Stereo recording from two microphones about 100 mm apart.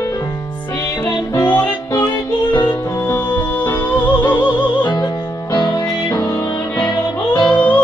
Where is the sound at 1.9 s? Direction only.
35° left (ahead or behind).